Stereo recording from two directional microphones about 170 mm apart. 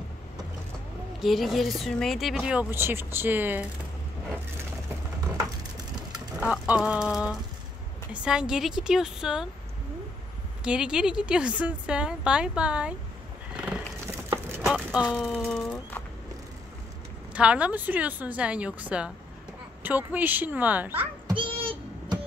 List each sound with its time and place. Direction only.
1.2 s speech: centre (ahead or behind)
6.1 s speech: 5° right (ahead or behind)
10.6 s speech: 5° right (ahead or behind)
13.6 s horse: 10° right (ahead or behind)
15.1 s speech: centre (ahead or behind)
17.3 s a woman's voice: 5° right (ahead or behind)
21.3 s a sound: 30° right (ahead or behind)